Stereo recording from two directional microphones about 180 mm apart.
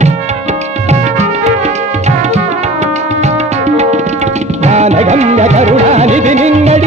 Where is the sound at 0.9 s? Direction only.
40° right (ahead or behind).